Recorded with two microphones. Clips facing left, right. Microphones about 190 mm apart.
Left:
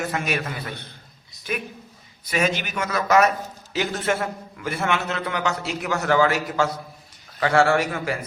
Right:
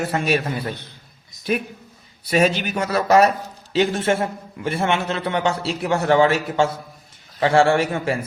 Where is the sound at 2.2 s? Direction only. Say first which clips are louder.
Right 5 dB; 35° right (ahead or behind).